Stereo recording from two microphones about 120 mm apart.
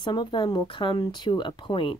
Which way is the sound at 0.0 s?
40° left (ahead or behind).